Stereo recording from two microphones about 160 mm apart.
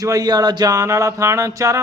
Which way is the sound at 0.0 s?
25° right (ahead or behind).